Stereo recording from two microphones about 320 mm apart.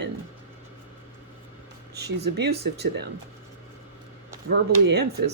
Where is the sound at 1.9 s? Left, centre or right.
Right.